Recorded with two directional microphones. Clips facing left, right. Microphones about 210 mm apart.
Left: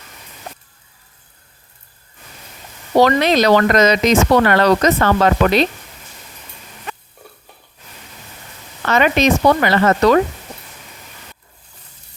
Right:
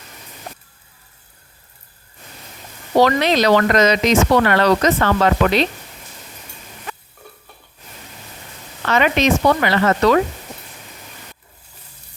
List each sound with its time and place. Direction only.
3.0 s speech: 45° left (ahead or behind)
8.9 s speech: 45° left (ahead or behind)